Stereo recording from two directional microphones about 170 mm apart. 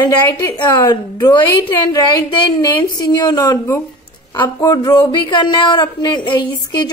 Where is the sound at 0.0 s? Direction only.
20° left (ahead or behind).